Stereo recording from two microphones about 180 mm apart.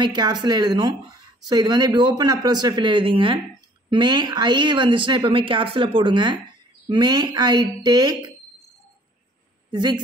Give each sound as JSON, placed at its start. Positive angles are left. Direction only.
{"t": 0.0, "sound": "speech", "side_deg": -25}
{"t": 9.7, "sound": "speech", "side_deg": -25}